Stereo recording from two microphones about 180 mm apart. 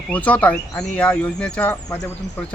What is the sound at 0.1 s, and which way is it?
Speech, 10° left (ahead or behind).